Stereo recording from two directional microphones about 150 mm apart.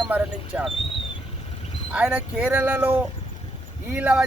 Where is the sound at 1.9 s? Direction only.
10° right (ahead or behind).